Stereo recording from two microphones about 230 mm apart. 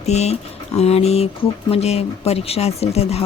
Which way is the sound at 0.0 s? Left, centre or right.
Left.